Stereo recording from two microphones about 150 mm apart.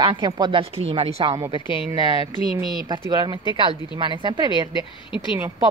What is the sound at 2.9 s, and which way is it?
A woman's voice, 30° right (ahead or behind).